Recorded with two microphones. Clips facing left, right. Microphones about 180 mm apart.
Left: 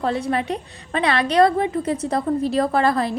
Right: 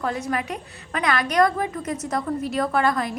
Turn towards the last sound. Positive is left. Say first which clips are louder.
# left 3 dB
turn(degrees=35)  # may be behind; listen again after turning